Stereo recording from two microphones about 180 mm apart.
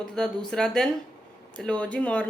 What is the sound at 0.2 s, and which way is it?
A woman's voice, 5° left (ahead or behind).